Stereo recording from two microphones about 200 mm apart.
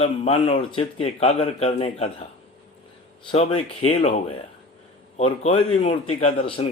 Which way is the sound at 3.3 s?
30° left (ahead or behind).